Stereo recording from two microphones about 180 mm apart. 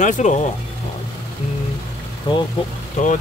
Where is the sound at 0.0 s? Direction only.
40° left (ahead or behind).